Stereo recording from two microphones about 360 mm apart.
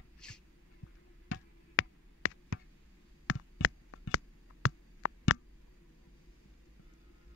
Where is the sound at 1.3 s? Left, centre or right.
Left.